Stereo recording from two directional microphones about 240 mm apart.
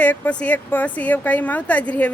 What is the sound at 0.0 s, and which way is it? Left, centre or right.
A woman's voice, centre.